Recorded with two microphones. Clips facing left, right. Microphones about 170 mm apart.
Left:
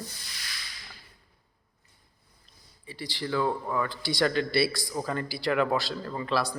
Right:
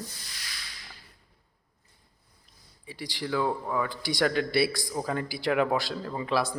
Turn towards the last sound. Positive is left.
turn(degrees=-15)  # may be behind; listen again after turning